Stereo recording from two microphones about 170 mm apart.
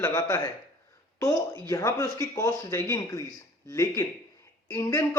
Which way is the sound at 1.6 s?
15° left (ahead or behind).